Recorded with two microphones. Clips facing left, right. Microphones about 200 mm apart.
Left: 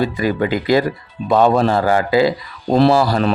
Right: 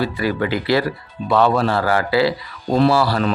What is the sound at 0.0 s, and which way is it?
Speech, 20° left (ahead or behind).